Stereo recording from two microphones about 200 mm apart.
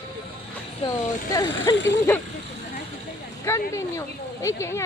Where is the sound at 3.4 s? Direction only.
15° left (ahead or behind).